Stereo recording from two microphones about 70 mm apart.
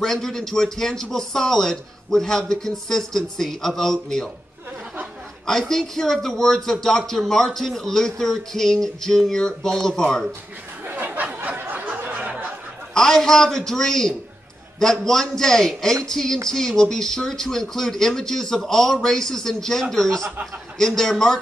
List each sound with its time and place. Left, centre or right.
0.0 s a man's voice: centre
5.5 s a man's voice: centre
11.1 s a sound: centre
12.9 s a man's voice: centre